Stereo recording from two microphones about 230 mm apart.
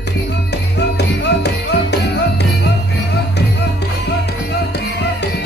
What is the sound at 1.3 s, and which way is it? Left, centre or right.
Music, left.